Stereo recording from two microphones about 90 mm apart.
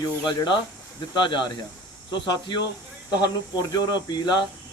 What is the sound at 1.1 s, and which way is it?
Speech, 60° left (ahead or behind).